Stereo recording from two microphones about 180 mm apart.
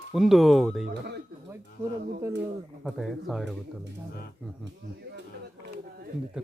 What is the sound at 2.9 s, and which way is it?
Speech, centre (ahead or behind).